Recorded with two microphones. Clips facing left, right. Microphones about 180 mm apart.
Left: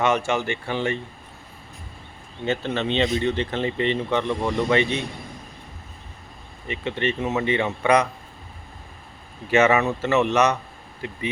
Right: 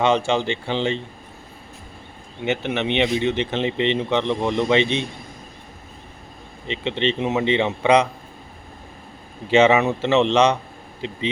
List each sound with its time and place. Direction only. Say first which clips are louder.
0.0 s speech: right 3 dB; 30° right (ahead or behind)
2.4 s speech: right 2 dB; 20° right (ahead or behind)
6.7 s speech: right 3 dB; 25° right (ahead or behind)
9.5 s speech: right 3 dB; 25° right (ahead or behind)